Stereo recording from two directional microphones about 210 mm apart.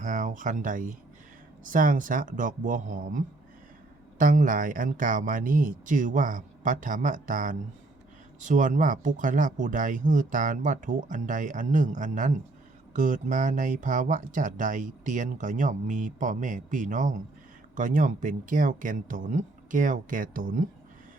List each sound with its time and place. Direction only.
0.0 s speech: 40° right (ahead or behind)